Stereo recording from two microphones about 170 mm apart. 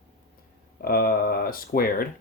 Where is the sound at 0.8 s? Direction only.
60° left (ahead or behind).